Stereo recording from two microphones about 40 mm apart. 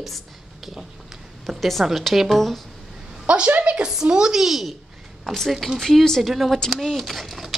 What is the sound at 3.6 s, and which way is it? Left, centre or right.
A woman's voice, right.